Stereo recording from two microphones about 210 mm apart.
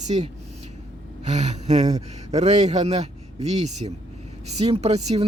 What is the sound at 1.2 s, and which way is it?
Speech, 35° right (ahead or behind).